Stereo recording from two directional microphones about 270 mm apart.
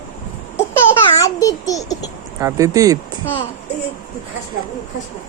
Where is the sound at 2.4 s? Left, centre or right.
Centre.